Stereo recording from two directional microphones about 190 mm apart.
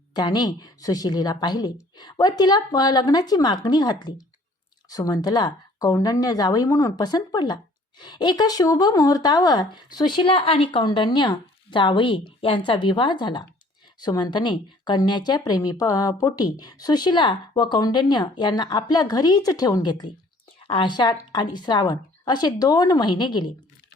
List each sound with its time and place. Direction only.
0.1 s speech: 20° left (ahead or behind)